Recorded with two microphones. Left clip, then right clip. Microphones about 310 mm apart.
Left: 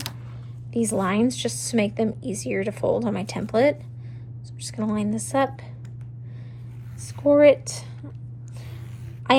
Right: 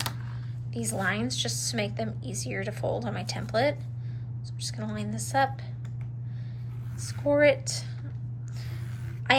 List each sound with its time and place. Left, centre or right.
0.7 s speech: centre
7.3 s speech: centre